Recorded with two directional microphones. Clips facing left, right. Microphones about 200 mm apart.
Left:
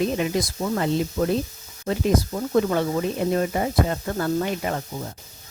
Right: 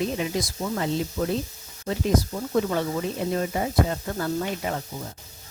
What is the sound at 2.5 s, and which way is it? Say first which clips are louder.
Speech: left 3 dB; 60° left (ahead or behind).